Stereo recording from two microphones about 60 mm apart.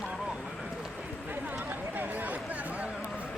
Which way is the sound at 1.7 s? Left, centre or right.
Right.